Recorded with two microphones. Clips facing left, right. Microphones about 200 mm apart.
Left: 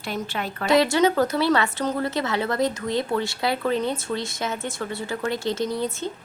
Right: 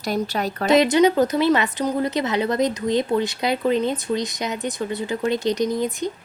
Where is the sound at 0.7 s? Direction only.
20° right (ahead or behind).